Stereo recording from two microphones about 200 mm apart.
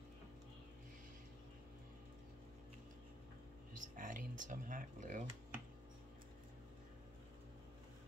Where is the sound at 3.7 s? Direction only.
40° right (ahead or behind).